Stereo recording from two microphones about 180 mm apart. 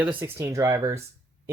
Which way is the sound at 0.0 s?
10° right (ahead or behind).